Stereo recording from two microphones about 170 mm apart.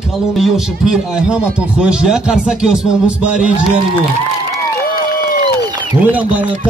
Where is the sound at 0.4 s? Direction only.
5° right (ahead or behind).